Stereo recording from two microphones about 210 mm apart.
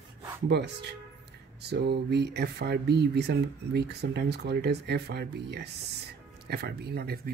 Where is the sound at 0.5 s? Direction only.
55° right (ahead or behind).